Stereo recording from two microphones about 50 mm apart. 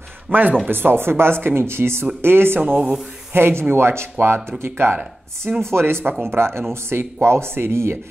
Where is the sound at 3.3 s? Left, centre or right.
Right.